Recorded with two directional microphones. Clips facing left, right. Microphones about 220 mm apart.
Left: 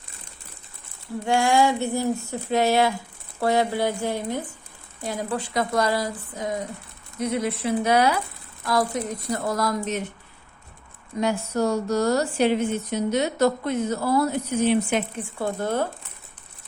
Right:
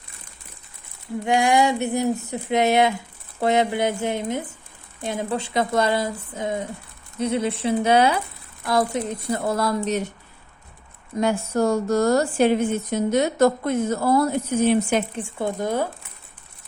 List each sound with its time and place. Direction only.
1.2 s a sound: 20° right (ahead or behind)
11.2 s a woman's voice: 50° right (ahead or behind)
15.2 s speech: 20° right (ahead or behind)